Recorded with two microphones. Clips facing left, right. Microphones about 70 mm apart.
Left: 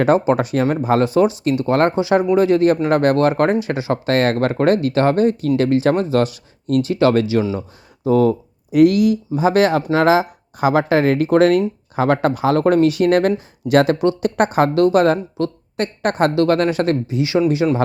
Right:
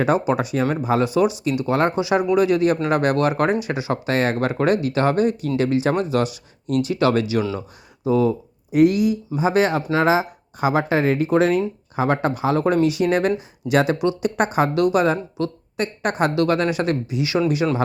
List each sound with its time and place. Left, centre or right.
0.0 s speech: left
8.0 s speech: left
11.9 s speech: left